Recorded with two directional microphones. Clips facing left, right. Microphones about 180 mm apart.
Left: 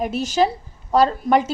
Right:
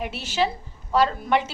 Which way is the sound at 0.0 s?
45° left (ahead or behind).